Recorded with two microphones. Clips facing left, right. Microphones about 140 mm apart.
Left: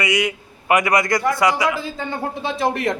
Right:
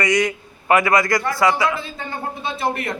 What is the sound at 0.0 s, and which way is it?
A man's voice, 10° left (ahead or behind).